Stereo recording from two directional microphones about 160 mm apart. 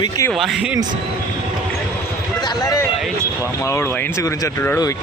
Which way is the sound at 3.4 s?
20° left (ahead or behind).